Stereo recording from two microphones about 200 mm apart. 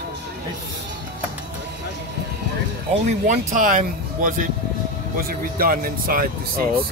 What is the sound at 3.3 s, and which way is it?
Speech, 40° right (ahead or behind).